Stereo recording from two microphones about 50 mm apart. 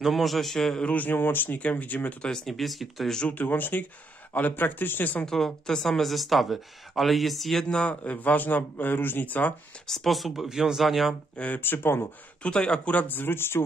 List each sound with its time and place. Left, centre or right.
0.0 s speech: centre
0.8 s speech: left
2.3 s speech: centre
3.3 s speech: left
5.2 s speech: centre
7.7 s speech: left
9.8 s speech: centre
11.3 s speech: left
11.6 s speech: left
12.4 s speech: centre
12.9 s speech: left